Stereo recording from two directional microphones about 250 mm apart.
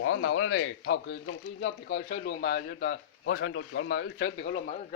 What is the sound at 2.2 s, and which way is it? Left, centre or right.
A man's voice, left.